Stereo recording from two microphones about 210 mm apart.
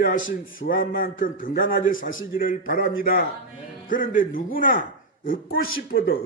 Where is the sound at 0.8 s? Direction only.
40° left (ahead or behind).